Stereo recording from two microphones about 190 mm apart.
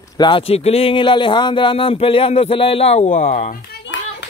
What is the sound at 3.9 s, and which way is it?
Clapping, 75° left (ahead or behind).